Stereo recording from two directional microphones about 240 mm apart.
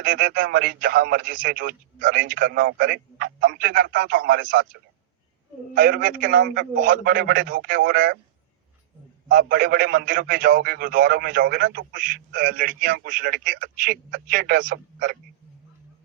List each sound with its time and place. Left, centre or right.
0.0 s a man's voice: right
5.7 s a man's voice: right
9.3 s a man's voice: right